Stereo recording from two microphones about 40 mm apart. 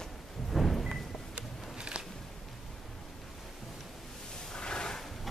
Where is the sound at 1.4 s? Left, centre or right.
Right.